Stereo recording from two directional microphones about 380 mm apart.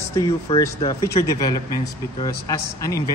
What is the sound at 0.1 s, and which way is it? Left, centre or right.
Speech, centre.